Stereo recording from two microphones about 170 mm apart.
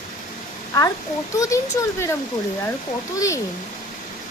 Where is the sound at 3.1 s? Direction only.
20° left (ahead or behind).